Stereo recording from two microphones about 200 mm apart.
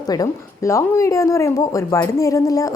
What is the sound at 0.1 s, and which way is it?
A woman's voice, 15° left (ahead or behind).